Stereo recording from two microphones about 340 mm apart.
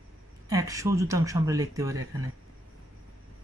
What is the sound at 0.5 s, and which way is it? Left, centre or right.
Speech, centre.